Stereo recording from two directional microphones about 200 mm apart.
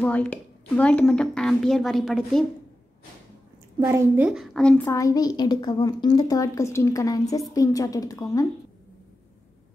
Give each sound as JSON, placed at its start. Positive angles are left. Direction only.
{"t": 0.0, "sound": "a woman's voice", "side_deg": 5}
{"t": 3.8, "sound": "a woman's voice", "side_deg": -15}
{"t": 4.3, "sound": "a woman's voice", "side_deg": 0}